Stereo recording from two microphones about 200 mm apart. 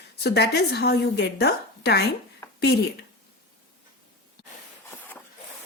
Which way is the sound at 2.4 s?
15° left (ahead or behind).